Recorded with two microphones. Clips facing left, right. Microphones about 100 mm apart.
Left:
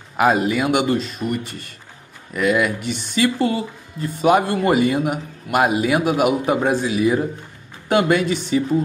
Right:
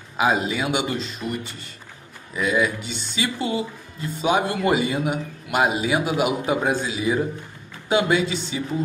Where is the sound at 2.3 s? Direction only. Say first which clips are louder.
Left 3 dB; 65° left (ahead or behind).